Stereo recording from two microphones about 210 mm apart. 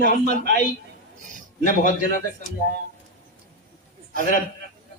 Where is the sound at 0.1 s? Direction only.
35° left (ahead or behind).